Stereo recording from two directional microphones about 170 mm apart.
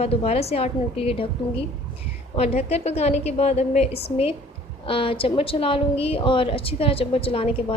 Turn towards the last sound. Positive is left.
turn(degrees=35)  # may be behind; listen again after turning